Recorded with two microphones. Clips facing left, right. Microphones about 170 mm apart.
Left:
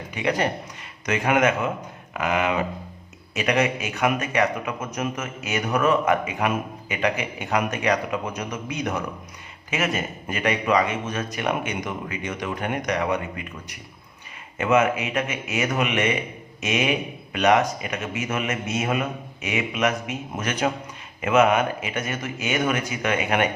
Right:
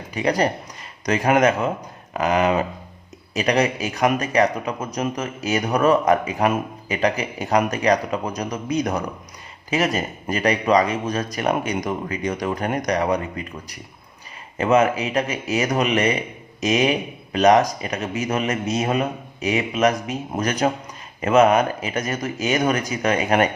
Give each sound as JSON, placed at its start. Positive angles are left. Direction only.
{"t": 0.1, "sound": "speech", "side_deg": -35}